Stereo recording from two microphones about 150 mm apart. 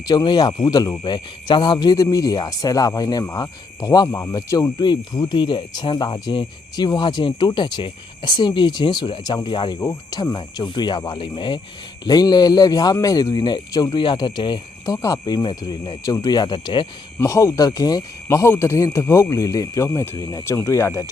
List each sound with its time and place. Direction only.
0.1 s speech: 25° left (ahead or behind)